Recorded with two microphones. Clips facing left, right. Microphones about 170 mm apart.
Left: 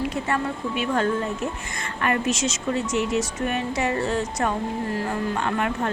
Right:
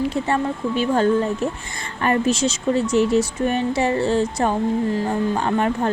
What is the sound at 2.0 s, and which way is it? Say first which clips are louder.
Speech: right 5 dB; 30° right (ahead or behind).